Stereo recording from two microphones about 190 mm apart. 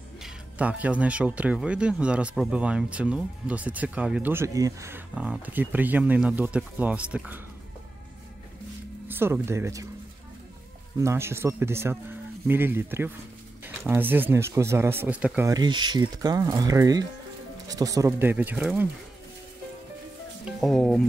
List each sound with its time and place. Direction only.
0.2 s speech: 5° right (ahead or behind)
9.0 s speech: 10° right (ahead or behind)
11.0 s speech: 15° right (ahead or behind)
15.5 s speech: 20° right (ahead or behind)
20.6 s speech: centre (ahead or behind)